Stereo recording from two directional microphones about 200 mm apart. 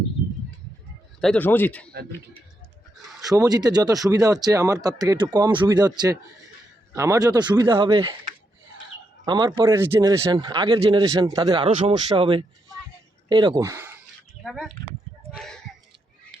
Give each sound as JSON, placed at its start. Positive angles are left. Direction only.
{"t": 1.2, "sound": "speech", "side_deg": 5}
{"t": 3.2, "sound": "speech", "side_deg": -20}
{"t": 6.9, "sound": "a man's voice", "side_deg": -15}
{"t": 9.2, "sound": "speech", "side_deg": -20}
{"t": 14.4, "sound": "speech", "side_deg": 0}